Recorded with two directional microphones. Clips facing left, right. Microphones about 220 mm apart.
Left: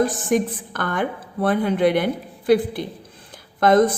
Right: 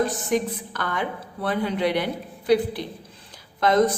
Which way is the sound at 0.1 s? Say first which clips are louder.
Left 3 dB; 50° left (ahead or behind).